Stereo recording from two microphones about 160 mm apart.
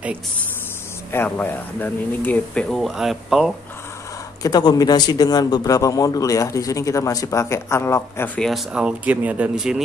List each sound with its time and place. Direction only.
1.1 s speech: 10° left (ahead or behind)
4.4 s a man's voice: 25° left (ahead or behind)
8.4 s speech: centre (ahead or behind)